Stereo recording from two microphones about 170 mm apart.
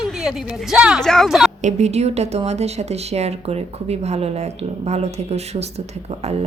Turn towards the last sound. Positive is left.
turn(degrees=-40)  # may be behind; listen again after turning